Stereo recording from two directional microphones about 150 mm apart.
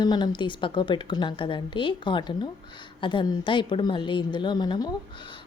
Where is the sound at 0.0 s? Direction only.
30° left (ahead or behind).